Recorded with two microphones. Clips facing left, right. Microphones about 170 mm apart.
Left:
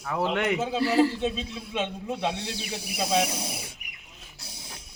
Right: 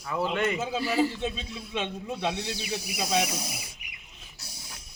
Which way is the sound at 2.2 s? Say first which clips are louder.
Right 2 dB; 30° left (ahead or behind).